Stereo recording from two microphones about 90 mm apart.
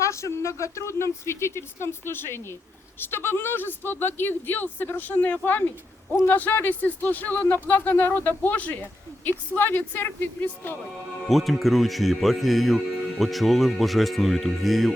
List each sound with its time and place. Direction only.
0.0 s speech: 35° left (ahead or behind)
11.3 s speech: centre (ahead or behind)